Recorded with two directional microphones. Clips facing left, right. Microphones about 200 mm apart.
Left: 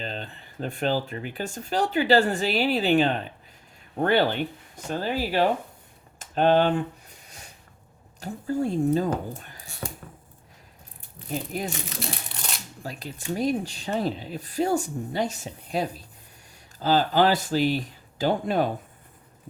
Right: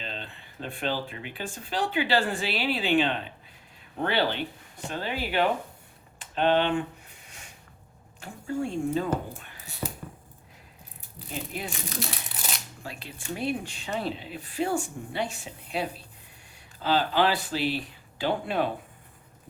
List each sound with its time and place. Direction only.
0.0 s speech: 40° left (ahead or behind)
8.2 s speech: 35° left (ahead or behind)
9.4 s a sound: 40° left (ahead or behind)
11.3 s speech: 40° left (ahead or behind)
11.9 s crumpling: centre (ahead or behind)
12.8 s speech: 40° left (ahead or behind)